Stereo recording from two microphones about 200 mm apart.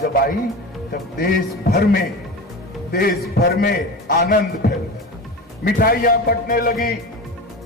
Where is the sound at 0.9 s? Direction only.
50° left (ahead or behind).